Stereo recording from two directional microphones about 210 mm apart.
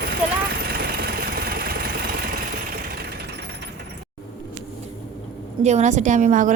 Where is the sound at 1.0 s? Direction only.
45° right (ahead or behind).